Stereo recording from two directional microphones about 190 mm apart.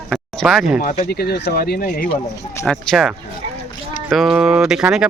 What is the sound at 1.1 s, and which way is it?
Speech, 55° left (ahead or behind).